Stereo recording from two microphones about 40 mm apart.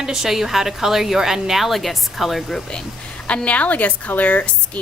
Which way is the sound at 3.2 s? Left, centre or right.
Left.